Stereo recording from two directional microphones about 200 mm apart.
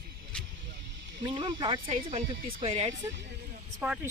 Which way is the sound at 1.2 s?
20° right (ahead or behind).